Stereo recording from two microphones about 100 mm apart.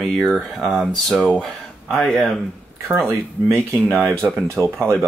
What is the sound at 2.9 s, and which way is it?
Speech, 20° right (ahead or behind).